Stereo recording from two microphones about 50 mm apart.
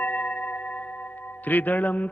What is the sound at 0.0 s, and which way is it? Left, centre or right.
Singing bowl, left.